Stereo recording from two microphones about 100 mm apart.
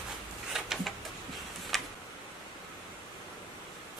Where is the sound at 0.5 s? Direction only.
5° right (ahead or behind).